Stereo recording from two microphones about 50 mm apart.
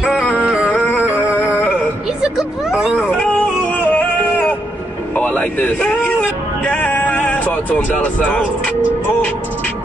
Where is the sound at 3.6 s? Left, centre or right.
Left.